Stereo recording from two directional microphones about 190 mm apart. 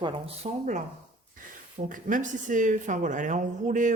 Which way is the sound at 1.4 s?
45° right (ahead or behind).